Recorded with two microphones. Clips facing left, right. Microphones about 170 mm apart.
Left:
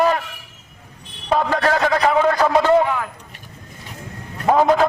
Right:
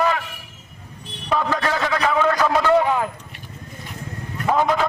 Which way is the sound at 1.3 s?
35° left (ahead or behind).